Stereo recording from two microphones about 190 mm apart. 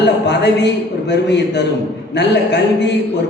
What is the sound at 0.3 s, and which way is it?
Speech, 65° left (ahead or behind).